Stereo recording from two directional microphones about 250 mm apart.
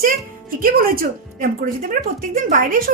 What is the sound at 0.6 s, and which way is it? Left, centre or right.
A woman's voice, right.